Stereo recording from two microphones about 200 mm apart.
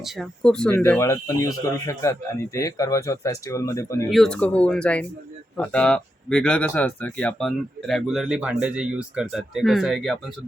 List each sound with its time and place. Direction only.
0.0 s speech: centre (ahead or behind)
4.1 s speech: 5° left (ahead or behind)